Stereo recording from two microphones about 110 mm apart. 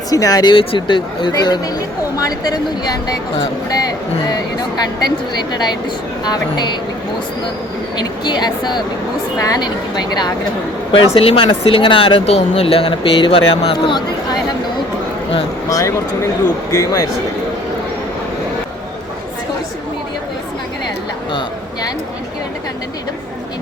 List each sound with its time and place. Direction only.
0.1 s speech: 35° left (ahead or behind)
0.5 s speech: 55° left (ahead or behind)
7.9 s speech: 40° left (ahead or behind)
10.9 s speech: 60° left (ahead or behind)
16.7 s speech: 30° left (ahead or behind)